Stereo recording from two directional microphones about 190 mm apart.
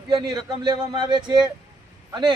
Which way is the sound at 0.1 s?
20° right (ahead or behind).